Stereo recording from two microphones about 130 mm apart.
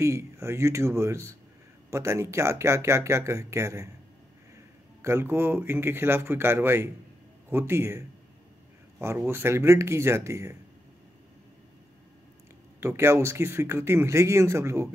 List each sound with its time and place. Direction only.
0.0 s speech: 20° right (ahead or behind)
5.0 s speech: 20° right (ahead or behind)
9.0 s speech: 20° right (ahead or behind)
12.8 s speech: 20° right (ahead or behind)